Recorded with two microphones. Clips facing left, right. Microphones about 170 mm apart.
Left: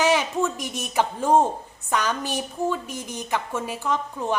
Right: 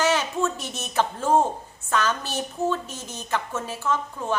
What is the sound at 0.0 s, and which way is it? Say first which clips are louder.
A woman's voice: left 2 dB; 15° left (ahead or behind).